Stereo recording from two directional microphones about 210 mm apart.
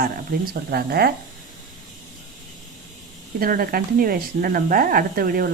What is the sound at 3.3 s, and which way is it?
A woman's voice, 45° right (ahead or behind).